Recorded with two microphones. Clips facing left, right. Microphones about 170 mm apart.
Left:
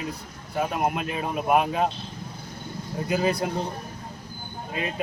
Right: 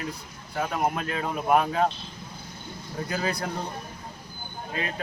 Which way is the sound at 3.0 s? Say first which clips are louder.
Left 6 dB; 15° left (ahead or behind).